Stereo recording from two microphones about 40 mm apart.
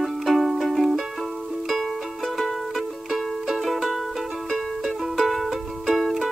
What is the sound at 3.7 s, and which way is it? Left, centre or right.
Music, centre.